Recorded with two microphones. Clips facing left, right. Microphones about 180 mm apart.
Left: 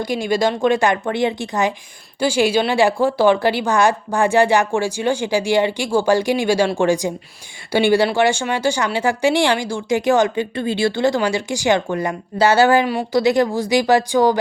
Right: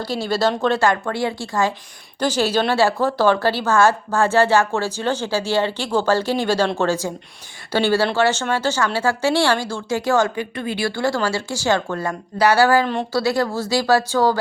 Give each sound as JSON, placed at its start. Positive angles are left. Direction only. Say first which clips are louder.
{"t": 0.0, "sound": "speech", "louder": "left 2 dB", "side_deg": 15}